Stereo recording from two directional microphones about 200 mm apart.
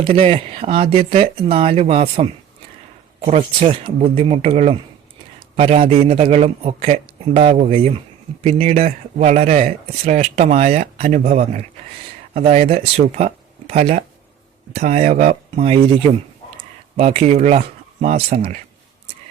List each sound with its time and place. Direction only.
0.0 s speech: 30° right (ahead or behind)